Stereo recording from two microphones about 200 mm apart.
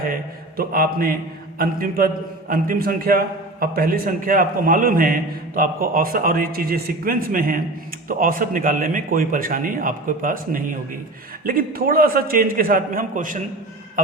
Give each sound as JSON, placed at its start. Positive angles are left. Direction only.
{"t": 0.1, "sound": "a man's voice", "side_deg": -45}